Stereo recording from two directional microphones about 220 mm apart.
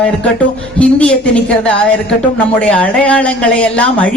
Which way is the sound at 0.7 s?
5° left (ahead or behind).